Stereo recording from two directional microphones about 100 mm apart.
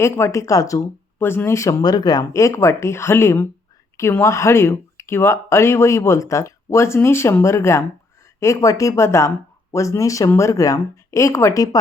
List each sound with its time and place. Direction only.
0.0 s speech: 30° left (ahead or behind)
1.2 s speech: 20° left (ahead or behind)
1.8 s speech: 40° left (ahead or behind)